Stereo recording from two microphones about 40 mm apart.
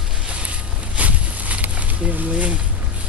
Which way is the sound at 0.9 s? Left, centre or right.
Right.